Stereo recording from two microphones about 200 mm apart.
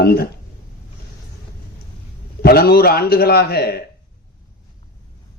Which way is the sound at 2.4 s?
50° left (ahead or behind).